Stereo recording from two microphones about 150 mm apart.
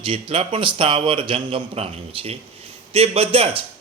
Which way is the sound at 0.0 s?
35° right (ahead or behind).